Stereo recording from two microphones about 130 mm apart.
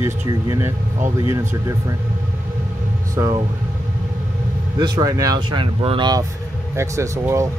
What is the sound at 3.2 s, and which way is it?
Speech, 25° right (ahead or behind).